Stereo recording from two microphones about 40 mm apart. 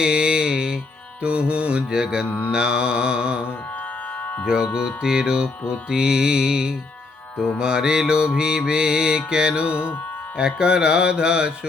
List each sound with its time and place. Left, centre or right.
0.0 s music: right
1.2 s mantra: right
2.2 s mantra: left
2.5 s mantra: right
4.2 s music: left
4.4 s mantra: centre